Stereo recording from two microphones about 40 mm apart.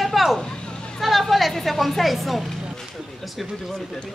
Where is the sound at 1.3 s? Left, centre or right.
Centre.